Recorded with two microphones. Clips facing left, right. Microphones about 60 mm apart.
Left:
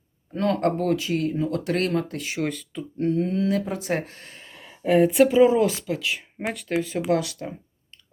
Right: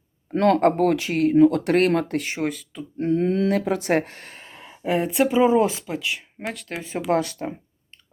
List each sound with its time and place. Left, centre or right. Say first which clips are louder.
0.3 s speech: right 5 dB; right
2.4 s speech: right 1 dB; centre
3.1 s speech: right 4 dB; right
3.3 s speech: right 3 dB; right
4.6 s speech: left 5 dB; centre
5.3 s speech: left 1 dB; centre
6.5 s speech: left 4 dB; centre
7.1 s speech: right 3 dB; right